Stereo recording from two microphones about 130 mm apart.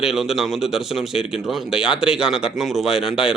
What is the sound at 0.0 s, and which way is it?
Speech, 5° right (ahead or behind).